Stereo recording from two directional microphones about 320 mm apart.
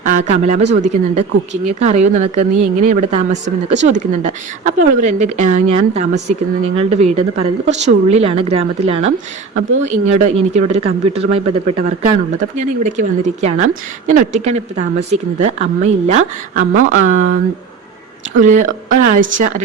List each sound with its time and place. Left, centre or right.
0.0 s speech: right
9.6 s speech: right
10.2 s speech: right
16.6 s speech: right
18.3 s speech: right